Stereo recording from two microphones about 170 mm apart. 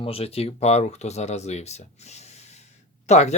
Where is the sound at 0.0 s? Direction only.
35° left (ahead or behind).